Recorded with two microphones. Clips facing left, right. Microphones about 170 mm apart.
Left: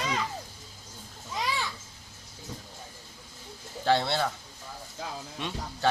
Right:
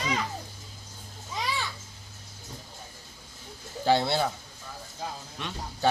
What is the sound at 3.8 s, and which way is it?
Speech, 5° right (ahead or behind).